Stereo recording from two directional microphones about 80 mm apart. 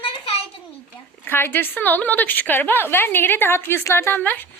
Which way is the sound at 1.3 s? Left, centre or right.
Left.